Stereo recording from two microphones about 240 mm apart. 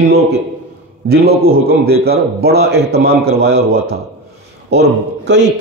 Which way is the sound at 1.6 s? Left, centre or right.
Right.